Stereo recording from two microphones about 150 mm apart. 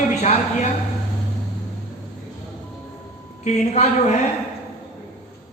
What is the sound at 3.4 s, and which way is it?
Speech, 50° left (ahead or behind).